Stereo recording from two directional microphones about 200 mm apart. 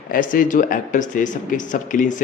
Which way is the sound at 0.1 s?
40° left (ahead or behind).